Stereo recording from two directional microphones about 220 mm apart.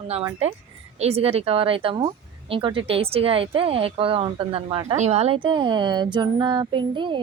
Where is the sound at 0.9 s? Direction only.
30° right (ahead or behind).